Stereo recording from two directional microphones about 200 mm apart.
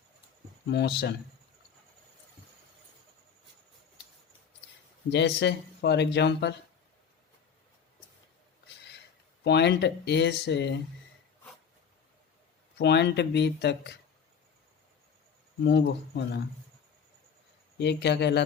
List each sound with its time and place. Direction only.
0.7 s speech: 55° left (ahead or behind)
5.1 s speech: 60° left (ahead or behind)
9.4 s speech: 60° left (ahead or behind)
12.8 s speech: 55° left (ahead or behind)
15.6 s speech: 60° left (ahead or behind)
17.7 s speech: 60° left (ahead or behind)